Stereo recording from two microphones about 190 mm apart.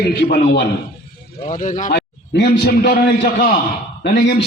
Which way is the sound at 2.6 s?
55° left (ahead or behind).